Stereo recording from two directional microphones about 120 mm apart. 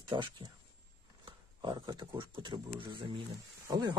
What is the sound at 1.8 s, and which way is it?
Speech, 35° right (ahead or behind).